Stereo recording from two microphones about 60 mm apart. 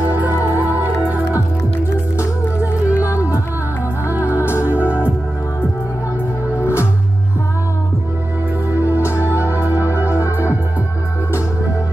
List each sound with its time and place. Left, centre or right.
0.6 s music: right
2.6 s music: right
4.4 s music: left
4.8 s music: right
6.6 s music: left
9.0 s music: left